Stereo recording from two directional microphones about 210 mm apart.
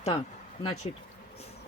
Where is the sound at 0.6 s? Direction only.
25° left (ahead or behind).